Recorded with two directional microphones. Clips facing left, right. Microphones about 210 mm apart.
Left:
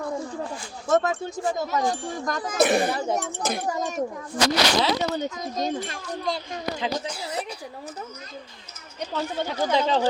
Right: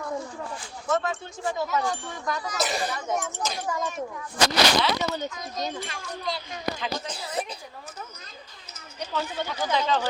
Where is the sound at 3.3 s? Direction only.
55° left (ahead or behind).